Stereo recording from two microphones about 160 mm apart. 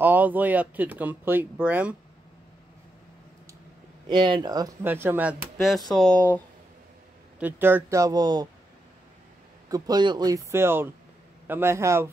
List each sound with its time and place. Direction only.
0.0 s speech: 10° right (ahead or behind)
4.1 s speech: 30° right (ahead or behind)
4.8 s speech: 15° right (ahead or behind); by 6.4 s 10° left (ahead or behind)
7.3 s speech: 10° right (ahead or behind)
9.7 s speech: 25° right (ahead or behind)